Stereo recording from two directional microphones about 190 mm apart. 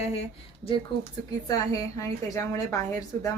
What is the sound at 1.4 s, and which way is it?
A woman's voice, 20° left (ahead or behind).